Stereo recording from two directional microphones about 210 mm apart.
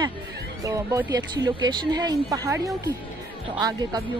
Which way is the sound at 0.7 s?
15° right (ahead or behind).